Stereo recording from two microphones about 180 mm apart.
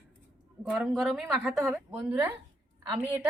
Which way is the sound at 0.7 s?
Centre (ahead or behind).